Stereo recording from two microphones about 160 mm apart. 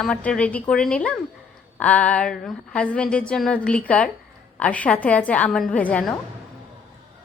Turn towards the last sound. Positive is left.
turn(degrees=5)  # may be behind; listen again after turning